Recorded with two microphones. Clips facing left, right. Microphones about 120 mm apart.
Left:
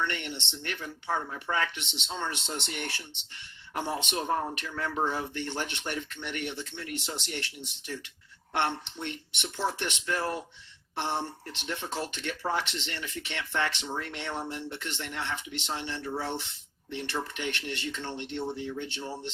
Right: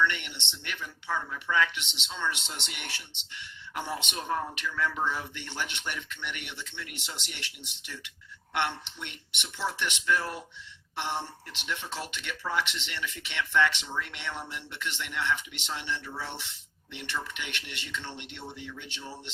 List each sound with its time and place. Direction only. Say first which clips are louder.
0.0 s speech: right 3 dB; 40° left (ahead or behind)